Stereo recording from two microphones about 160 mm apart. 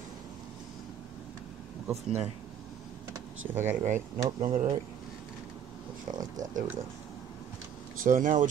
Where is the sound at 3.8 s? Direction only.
50° right (ahead or behind).